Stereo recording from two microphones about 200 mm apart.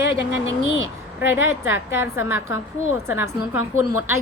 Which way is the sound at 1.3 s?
10° right (ahead or behind).